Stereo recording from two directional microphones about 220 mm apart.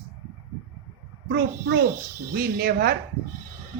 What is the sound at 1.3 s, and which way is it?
A man's voice, 45° right (ahead or behind).